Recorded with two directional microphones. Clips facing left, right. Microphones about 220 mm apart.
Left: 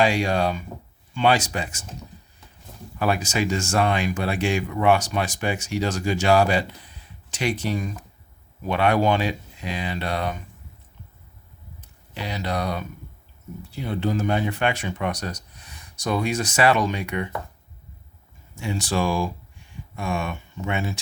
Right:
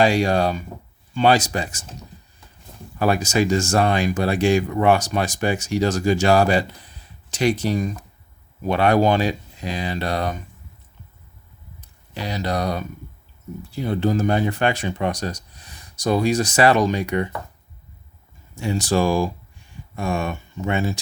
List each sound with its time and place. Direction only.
0.0 s speech: 40° right (ahead or behind)
3.0 s speech: 40° right (ahead or behind)
12.1 s speech: 40° right (ahead or behind)
18.5 s speech: 40° right (ahead or behind)